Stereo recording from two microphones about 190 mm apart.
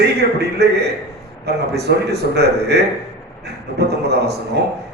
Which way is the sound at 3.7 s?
60° right (ahead or behind).